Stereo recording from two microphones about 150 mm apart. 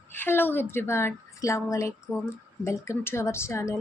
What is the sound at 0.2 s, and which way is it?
A woman's voice, 15° left (ahead or behind).